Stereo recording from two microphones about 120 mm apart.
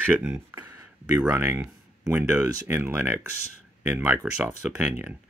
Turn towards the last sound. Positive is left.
turn(degrees=-15)  # may be behind; listen again after turning